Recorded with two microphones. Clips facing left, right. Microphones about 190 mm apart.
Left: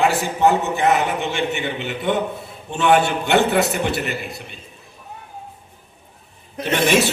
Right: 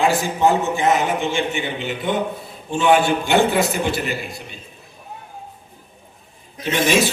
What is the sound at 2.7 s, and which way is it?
A man's voice, 60° left (ahead or behind).